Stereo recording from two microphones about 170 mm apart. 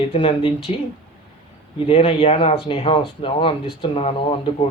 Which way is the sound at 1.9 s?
35° left (ahead or behind).